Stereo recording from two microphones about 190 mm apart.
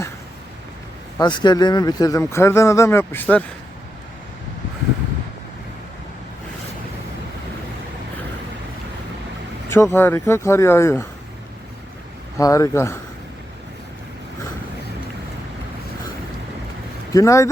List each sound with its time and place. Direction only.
1.2 s speech: 25° left (ahead or behind)
9.9 s speech: 10° left (ahead or behind)
12.4 s speech: 15° left (ahead or behind)
17.1 s speech: 15° left (ahead or behind)